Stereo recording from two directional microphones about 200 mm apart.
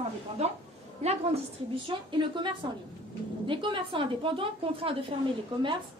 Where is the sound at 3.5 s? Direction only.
25° right (ahead or behind).